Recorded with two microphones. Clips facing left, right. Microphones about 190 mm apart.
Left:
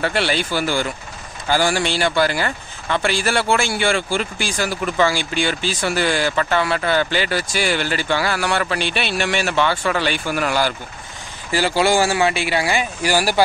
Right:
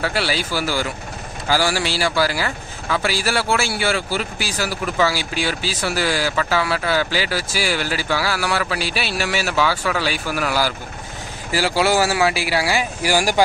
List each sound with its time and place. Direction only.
0.0 s a man's voice: 5° right (ahead or behind)